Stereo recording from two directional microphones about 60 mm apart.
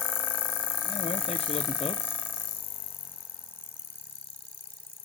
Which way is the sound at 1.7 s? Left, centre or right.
Left.